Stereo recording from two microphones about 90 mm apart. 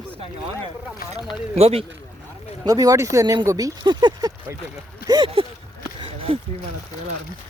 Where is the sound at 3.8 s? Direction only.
55° right (ahead or behind).